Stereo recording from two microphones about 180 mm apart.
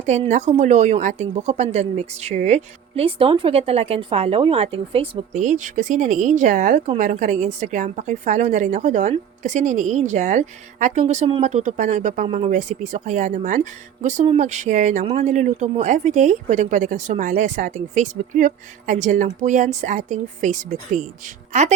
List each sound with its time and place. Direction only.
0.1 s a woman's voice: 40° right (ahead or behind)